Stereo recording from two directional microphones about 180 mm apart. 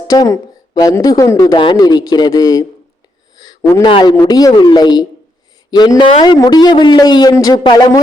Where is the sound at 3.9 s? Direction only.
25° left (ahead or behind).